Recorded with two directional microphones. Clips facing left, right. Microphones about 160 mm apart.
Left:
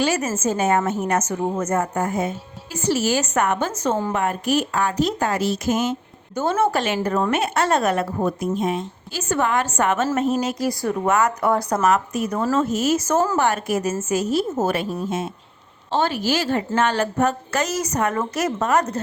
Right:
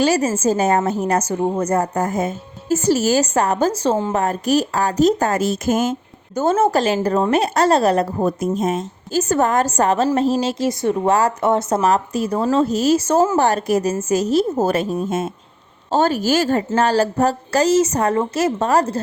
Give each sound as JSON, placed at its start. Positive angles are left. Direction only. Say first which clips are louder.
{"t": 0.0, "sound": "speech", "louder": "right 5 dB", "side_deg": -35}